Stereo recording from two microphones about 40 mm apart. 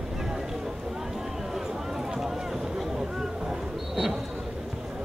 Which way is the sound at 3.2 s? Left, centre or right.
Centre.